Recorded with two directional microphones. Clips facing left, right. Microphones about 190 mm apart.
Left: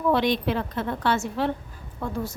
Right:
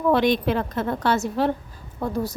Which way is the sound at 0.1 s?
50° right (ahead or behind).